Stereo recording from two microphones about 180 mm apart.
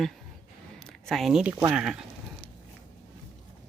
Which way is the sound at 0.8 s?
5° left (ahead or behind).